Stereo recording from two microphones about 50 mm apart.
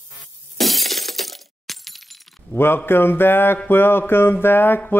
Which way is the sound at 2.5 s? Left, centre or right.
Left.